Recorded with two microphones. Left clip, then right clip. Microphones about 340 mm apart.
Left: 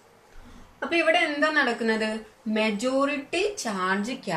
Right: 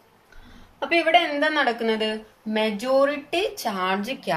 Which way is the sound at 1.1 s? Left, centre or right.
Right.